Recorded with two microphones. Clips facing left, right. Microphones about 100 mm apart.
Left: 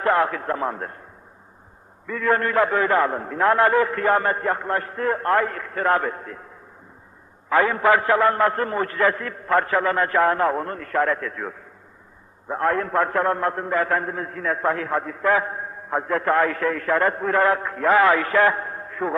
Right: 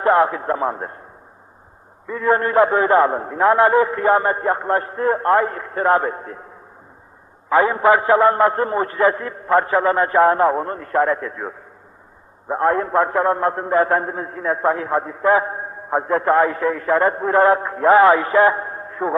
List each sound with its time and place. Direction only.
0.0 s a man's voice: 30° right (ahead or behind)
2.0 s a man's voice: 25° right (ahead or behind)
7.6 s a man's voice: 25° right (ahead or behind)